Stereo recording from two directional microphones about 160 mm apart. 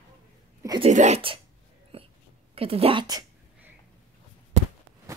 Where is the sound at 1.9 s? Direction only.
35° right (ahead or behind).